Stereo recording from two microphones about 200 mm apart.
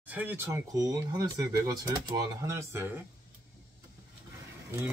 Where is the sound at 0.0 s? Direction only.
10° right (ahead or behind).